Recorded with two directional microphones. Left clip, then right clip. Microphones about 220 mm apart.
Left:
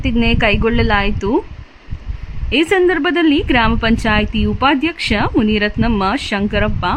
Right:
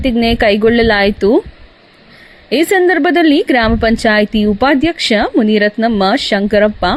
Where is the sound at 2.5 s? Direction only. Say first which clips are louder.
Right 3 dB; 15° right (ahead or behind).